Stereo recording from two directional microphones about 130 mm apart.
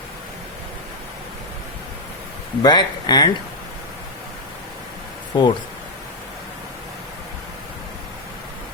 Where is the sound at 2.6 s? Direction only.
35° left (ahead or behind).